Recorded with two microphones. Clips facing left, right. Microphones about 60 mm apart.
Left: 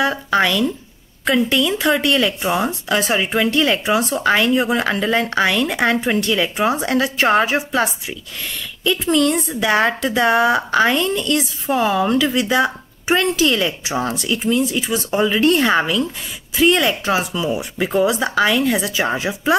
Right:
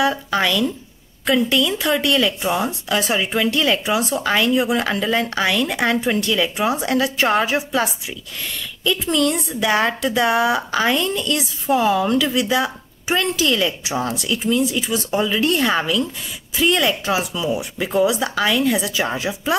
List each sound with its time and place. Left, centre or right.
0.4 s speech: centre
2.6 s speech: centre
3.2 s speech: centre
9.0 s speech: centre
15.1 s speech: centre
15.4 s speech: centre
17.7 s speech: centre
18.0 s speech: centre